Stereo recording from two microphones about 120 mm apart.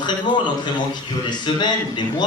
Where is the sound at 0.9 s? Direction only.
40° left (ahead or behind).